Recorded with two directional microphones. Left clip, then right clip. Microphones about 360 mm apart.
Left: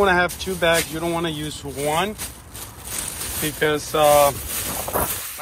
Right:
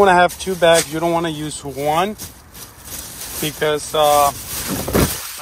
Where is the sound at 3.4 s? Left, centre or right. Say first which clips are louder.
Right 2 dB; centre.